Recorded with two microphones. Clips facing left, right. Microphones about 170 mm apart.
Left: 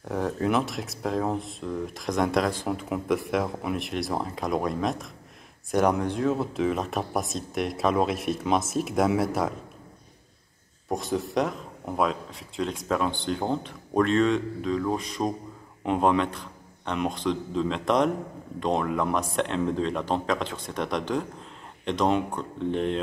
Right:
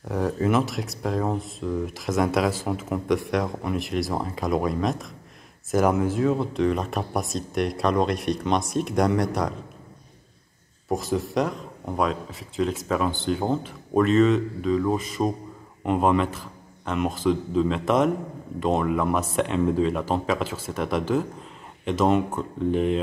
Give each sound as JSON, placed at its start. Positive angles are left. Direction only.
{"t": 0.1, "sound": "speech", "side_deg": 0}
{"t": 10.9, "sound": "speech", "side_deg": 0}